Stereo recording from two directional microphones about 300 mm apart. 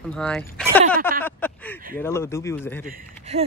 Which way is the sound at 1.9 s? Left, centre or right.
Centre.